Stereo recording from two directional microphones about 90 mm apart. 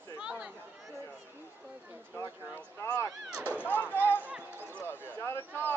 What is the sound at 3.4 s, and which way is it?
Chop, 20° left (ahead or behind).